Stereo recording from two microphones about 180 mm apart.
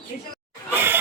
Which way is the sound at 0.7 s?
10° right (ahead or behind).